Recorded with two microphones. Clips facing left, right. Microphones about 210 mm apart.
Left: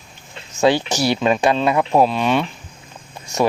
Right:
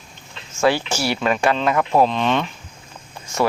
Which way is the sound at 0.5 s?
20° left (ahead or behind).